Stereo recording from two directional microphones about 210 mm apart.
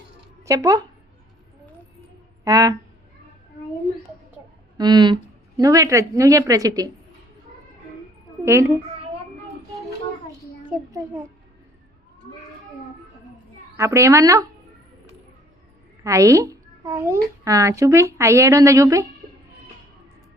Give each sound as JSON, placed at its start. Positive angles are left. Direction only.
{"t": 0.4, "sound": "speech", "side_deg": -15}
{"t": 2.4, "sound": "speech", "side_deg": -15}
{"t": 4.8, "sound": "a child's voice", "side_deg": -20}
{"t": 8.4, "sound": "a child's voice", "side_deg": -10}
{"t": 10.7, "sound": "a child's voice", "side_deg": -5}
{"t": 13.7, "sound": "a child's voice", "side_deg": -15}
{"t": 16.0, "sound": "a child's voice", "side_deg": -15}